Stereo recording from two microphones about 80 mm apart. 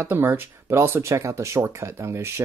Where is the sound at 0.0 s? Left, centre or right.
Right.